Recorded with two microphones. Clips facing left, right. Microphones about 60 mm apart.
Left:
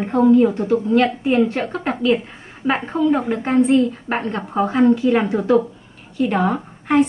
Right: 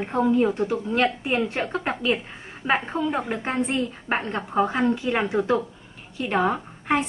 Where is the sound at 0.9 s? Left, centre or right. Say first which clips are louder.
Left 7 dB; right.